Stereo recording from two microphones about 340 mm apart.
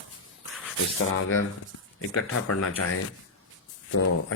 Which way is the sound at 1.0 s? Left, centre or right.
Left.